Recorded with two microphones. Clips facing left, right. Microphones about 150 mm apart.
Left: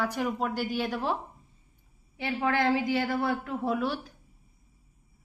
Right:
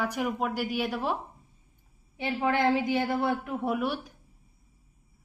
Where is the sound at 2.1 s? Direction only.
20° right (ahead or behind).